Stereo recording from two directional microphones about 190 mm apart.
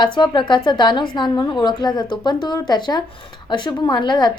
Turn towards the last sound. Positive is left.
turn(degrees=25)  # may be behind; listen again after turning